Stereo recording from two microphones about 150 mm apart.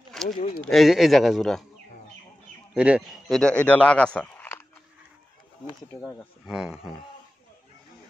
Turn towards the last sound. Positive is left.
turn(degrees=-5)  # may be behind; listen again after turning